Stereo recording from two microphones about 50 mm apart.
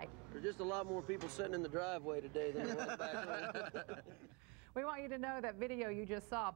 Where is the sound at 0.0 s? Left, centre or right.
Centre.